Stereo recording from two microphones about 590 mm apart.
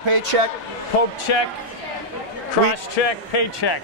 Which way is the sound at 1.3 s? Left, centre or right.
Left.